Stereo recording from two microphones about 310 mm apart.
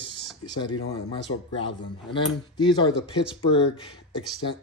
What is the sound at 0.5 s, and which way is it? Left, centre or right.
Speech, centre.